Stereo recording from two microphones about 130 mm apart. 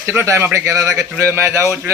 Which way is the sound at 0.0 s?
20° right (ahead or behind).